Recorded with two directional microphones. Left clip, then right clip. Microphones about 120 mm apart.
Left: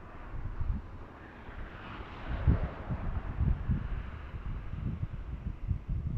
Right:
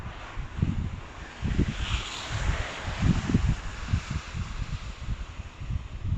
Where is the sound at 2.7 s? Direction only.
5° right (ahead or behind); by 5.1 s 30° right (ahead or behind).